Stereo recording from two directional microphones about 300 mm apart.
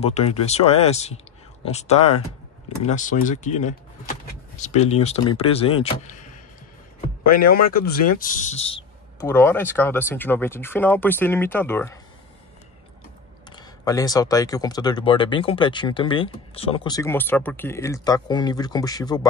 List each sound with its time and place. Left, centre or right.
0.0 s speech: left
7.5 s speech: left
9.2 s speech: centre
13.5 s speech: centre